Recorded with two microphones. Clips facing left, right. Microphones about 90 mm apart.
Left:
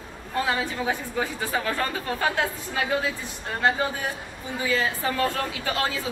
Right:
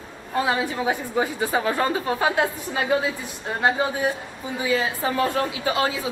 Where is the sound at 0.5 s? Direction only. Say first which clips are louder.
Right 3 dB; 20° right (ahead or behind).